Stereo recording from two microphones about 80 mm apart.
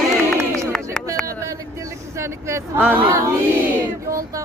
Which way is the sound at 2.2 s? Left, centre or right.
Right.